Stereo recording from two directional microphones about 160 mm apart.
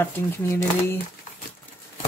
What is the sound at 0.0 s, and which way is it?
Speech, 15° left (ahead or behind).